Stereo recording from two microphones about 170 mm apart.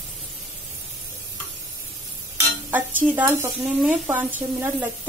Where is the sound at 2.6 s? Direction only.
10° right (ahead or behind).